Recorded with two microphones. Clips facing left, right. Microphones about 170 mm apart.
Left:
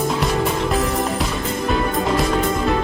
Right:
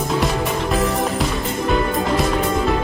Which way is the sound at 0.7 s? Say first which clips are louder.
Right 1 dB; centre (ahead or behind).